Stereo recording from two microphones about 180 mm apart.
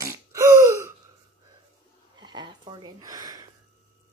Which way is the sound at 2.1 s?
25° right (ahead or behind).